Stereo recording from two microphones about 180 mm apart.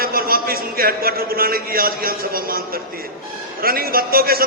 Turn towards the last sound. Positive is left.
turn(degrees=-55)  # may be behind; listen again after turning